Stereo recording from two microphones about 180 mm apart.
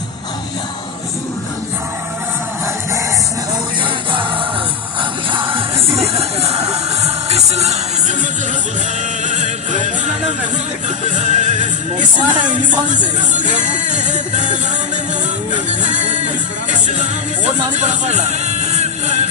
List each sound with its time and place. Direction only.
5.3 s music: 30° right (ahead or behind)
9.2 s music: 40° right (ahead or behind)
15.8 s music: 40° right (ahead or behind)
17.4 s music: 40° right (ahead or behind)